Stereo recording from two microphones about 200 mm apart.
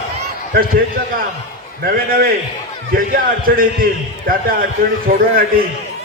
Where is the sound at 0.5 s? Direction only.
45° right (ahead or behind).